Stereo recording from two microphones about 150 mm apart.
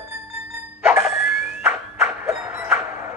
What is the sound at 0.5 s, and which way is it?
Music, 15° right (ahead or behind).